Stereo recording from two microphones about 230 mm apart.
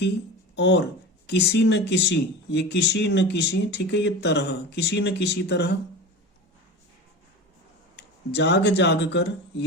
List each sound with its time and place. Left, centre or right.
0.5 s speech: left
7.9 s speech: left